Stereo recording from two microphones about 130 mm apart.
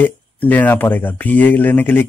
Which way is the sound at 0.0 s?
15° left (ahead or behind).